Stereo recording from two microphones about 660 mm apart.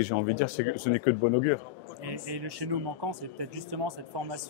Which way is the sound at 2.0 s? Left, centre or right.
Right.